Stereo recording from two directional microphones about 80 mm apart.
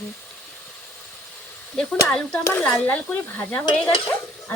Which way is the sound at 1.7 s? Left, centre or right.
Centre.